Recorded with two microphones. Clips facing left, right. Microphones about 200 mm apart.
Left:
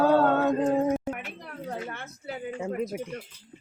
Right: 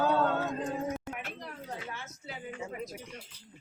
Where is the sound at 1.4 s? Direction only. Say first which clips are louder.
Left 6 dB; 55° left (ahead or behind).